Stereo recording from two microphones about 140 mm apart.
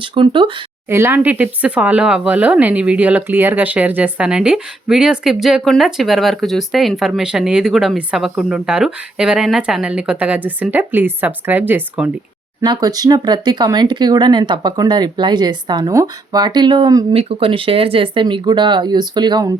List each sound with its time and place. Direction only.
0.0 s speech: 35° right (ahead or behind)
0.9 s speech: 15° right (ahead or behind)
12.6 s speech: 30° right (ahead or behind)
17.1 s speech: 40° right (ahead or behind)